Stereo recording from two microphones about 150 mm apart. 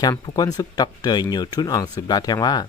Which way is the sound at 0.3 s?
25° left (ahead or behind).